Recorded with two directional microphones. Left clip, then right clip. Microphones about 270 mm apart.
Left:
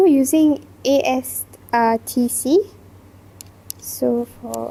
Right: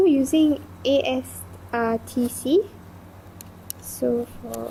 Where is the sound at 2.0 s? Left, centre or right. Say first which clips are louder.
Left 5 dB; left.